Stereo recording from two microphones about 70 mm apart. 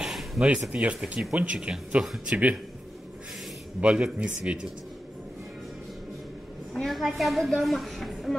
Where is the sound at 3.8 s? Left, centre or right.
Centre.